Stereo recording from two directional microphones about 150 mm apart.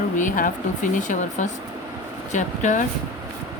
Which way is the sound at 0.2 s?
60° left (ahead or behind).